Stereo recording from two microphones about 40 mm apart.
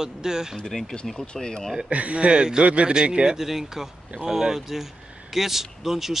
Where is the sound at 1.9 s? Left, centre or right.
Right.